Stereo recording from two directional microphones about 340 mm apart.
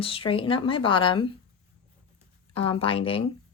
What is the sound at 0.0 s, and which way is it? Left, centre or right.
Speech, centre.